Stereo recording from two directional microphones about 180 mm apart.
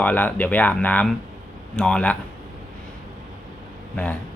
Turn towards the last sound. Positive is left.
turn(degrees=10)  # may be behind; listen again after turning